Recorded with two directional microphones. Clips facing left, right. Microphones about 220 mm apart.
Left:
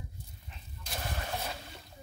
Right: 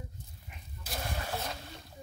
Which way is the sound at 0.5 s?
10° right (ahead or behind).